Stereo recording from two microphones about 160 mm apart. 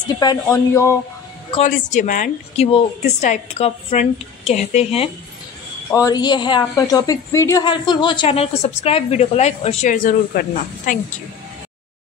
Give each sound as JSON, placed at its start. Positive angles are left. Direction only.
{"t": 0.2, "sound": "speech", "side_deg": 20}
{"t": 1.6, "sound": "speech", "side_deg": 50}
{"t": 2.6, "sound": "a woman's voice", "side_deg": 40}
{"t": 5.9, "sound": "speech", "side_deg": 20}
{"t": 7.6, "sound": "a woman's voice", "side_deg": 30}